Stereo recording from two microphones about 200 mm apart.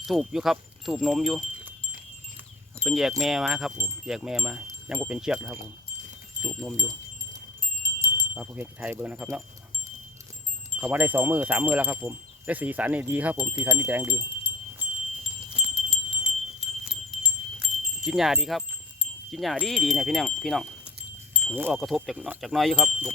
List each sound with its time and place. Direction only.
0.0 s speech: centre (ahead or behind)
2.8 s speech: centre (ahead or behind)
6.7 s wind chime: 15° right (ahead or behind)
8.0 s speech: 10° right (ahead or behind)
10.8 s wind chime: 10° right (ahead or behind)
15.5 s wind chime: 5° right (ahead or behind)
19.3 s speech: centre (ahead or behind)